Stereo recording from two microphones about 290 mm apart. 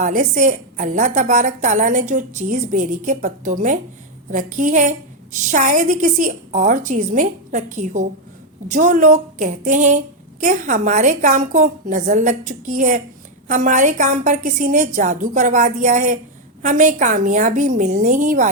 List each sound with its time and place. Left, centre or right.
0.0 s a woman's voice: right